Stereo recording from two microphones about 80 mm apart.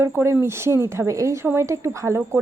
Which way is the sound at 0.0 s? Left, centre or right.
Right.